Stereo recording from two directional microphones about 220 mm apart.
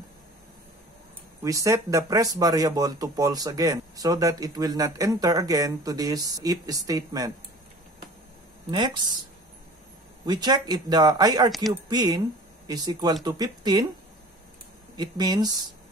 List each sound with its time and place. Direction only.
1.4 s speech: 15° right (ahead or behind)
8.6 s speech: 20° right (ahead or behind)
10.2 s speech: 20° right (ahead or behind)
15.0 s speech: 20° right (ahead or behind)